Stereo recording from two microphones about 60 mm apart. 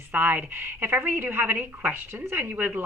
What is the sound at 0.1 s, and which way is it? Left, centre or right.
A woman's voice, right.